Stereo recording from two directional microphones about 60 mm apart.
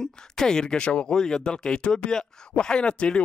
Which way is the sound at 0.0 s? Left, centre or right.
Centre.